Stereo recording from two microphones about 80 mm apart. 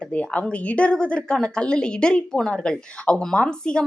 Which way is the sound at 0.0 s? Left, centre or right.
Centre.